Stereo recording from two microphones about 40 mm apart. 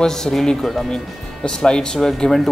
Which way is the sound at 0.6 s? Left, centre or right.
Centre.